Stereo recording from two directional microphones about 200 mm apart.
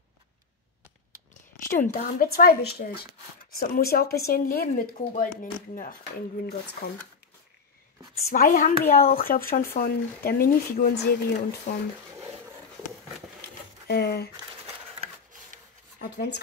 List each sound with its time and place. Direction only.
1.7 s speech: 40° left (ahead or behind)
6.4 s speech: 50° left (ahead or behind)
8.2 s a woman's voice: 40° left (ahead or behind)
12.2 s a sound: 15° right (ahead or behind)
13.8 s speech: 50° left (ahead or behind)
14.3 s a sound: 30° right (ahead or behind)
16.0 s speech: 55° left (ahead or behind)